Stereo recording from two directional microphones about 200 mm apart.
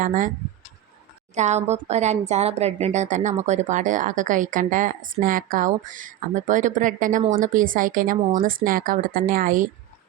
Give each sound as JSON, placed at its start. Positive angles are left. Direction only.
{"t": 0.0, "sound": "speech", "side_deg": -40}
{"t": 1.4, "sound": "speech", "side_deg": -35}